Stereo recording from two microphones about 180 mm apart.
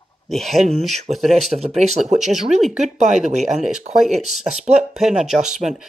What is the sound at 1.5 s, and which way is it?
Speech, 35° right (ahead or behind).